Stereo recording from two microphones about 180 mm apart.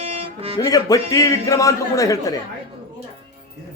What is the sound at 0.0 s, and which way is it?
Music, 35° right (ahead or behind).